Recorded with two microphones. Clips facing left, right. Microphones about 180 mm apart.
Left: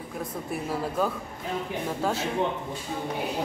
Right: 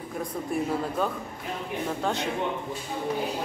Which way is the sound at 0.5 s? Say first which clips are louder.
Right 3 dB; 5° left (ahead or behind).